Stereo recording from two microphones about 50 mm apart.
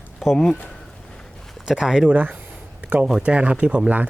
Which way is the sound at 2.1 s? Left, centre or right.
Right.